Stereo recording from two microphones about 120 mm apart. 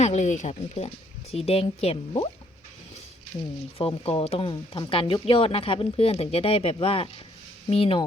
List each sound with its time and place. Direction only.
0.0 s speech: 70° left (ahead or behind)
1.3 s speech: 55° left (ahead or behind)
3.8 s speech: 50° left (ahead or behind)